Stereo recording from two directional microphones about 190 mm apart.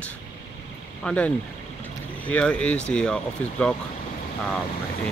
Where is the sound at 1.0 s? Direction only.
5° left (ahead or behind).